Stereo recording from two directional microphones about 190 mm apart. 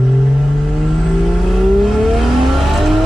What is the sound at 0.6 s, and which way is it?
Vehicle, centre (ahead or behind).